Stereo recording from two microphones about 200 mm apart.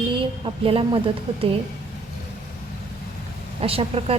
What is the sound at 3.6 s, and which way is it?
Speech, 30° right (ahead or behind).